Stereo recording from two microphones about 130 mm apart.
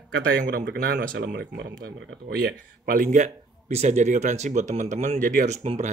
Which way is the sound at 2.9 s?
80° right.